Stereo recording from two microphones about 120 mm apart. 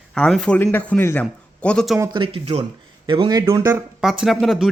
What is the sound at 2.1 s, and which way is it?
Speech, 45° right (ahead or behind).